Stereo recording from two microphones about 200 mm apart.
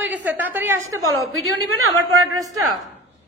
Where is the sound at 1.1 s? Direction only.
90° right.